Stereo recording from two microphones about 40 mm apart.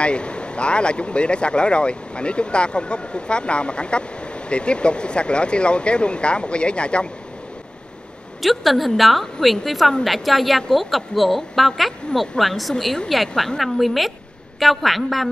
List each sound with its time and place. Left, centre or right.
0.0 s speech: left
8.4 s a woman's voice: centre